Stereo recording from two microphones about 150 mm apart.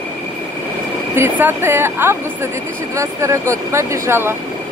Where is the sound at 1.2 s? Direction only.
15° right (ahead or behind).